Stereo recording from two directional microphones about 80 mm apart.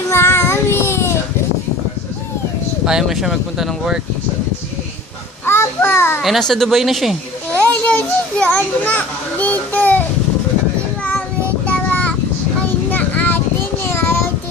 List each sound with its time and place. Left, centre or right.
0.1 s child singing: left
2.8 s speech: centre
5.5 s a sound: left
6.2 s speech: centre
7.5 s a child's voice: centre
11.6 s child singing: centre
12.6 s a sound: left
13.8 s child singing: left